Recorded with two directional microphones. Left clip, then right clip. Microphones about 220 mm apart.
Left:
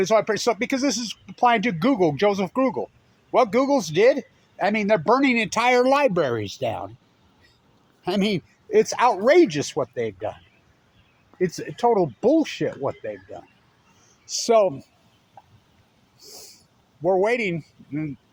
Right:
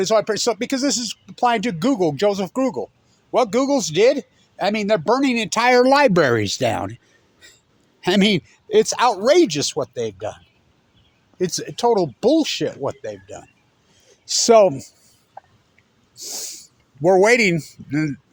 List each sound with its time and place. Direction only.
0.0 s speech: 25° right (ahead or behind)
5.5 s speech: 35° right (ahead or behind)
6.0 s speech: 50° right (ahead or behind)
8.0 s speech: 40° right (ahead or behind)
11.5 s speech: 30° right (ahead or behind)
12.9 s speech: 20° right (ahead or behind)
14.3 s a man's voice: 45° right (ahead or behind)
16.1 s speech: 55° right (ahead or behind)